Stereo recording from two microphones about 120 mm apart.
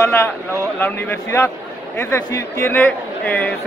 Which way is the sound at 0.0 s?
20° left (ahead or behind).